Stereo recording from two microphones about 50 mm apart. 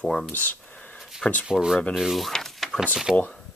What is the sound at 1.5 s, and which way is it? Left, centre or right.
Speech, centre.